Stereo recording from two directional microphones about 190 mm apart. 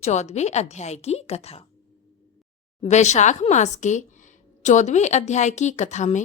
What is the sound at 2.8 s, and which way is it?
Speech, 35° left (ahead or behind).